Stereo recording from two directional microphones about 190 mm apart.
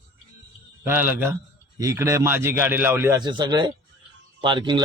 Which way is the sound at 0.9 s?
10° right (ahead or behind).